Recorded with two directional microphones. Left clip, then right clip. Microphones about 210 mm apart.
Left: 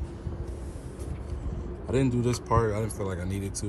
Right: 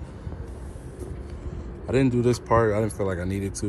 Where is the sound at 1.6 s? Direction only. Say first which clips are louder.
Right 4 dB; 15° left (ahead or behind).